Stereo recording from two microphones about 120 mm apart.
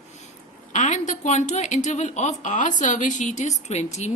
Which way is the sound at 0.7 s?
90° left.